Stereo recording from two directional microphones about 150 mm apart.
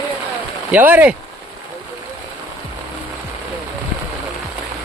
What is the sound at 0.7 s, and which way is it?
Speech, 10° right (ahead or behind).